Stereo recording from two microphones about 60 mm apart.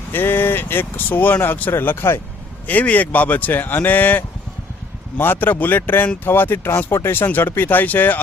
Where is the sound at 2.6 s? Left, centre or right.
Left.